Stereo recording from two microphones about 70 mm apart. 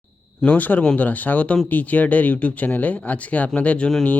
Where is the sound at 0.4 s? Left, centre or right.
Left.